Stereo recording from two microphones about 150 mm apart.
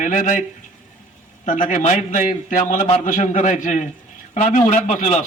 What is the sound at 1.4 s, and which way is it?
A man's voice, 55° left (ahead or behind).